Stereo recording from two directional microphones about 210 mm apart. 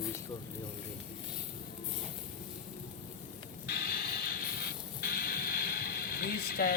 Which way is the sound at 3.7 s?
50° left (ahead or behind).